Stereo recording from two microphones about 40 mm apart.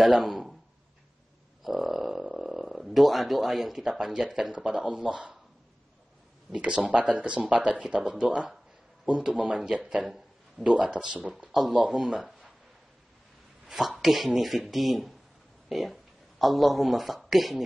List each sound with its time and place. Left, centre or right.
0.0 s speech: centre
1.6 s speech: centre
5.0 s speech: right
6.5 s speech: right
10.0 s a sound: centre
10.8 s speech: right
11.5 s speech: centre
13.7 s speech: centre